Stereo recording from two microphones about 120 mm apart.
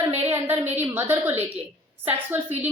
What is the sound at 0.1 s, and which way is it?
A woman's voice, 15° right (ahead or behind).